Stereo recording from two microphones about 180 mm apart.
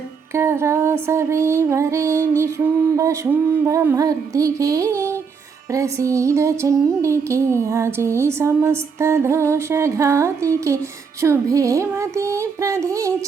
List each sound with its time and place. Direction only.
0.3 s music: 15° right (ahead or behind)